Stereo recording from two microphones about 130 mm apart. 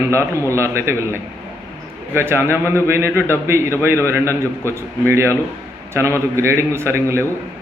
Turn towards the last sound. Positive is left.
turn(degrees=-20)  # may be behind; listen again after turning